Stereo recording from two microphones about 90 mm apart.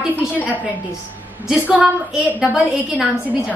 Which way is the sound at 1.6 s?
15° right (ahead or behind).